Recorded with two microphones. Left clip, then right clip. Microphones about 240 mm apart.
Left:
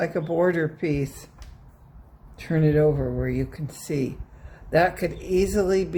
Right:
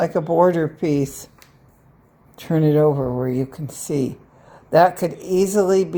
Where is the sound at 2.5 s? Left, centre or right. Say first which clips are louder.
Right 4 dB; centre.